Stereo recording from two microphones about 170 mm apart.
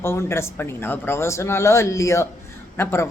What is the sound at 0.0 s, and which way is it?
A woman's voice, 15° left (ahead or behind).